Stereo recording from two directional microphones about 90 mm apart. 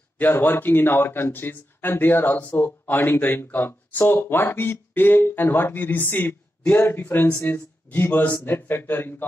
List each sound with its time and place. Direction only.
0.2 s speech: 20° left (ahead or behind)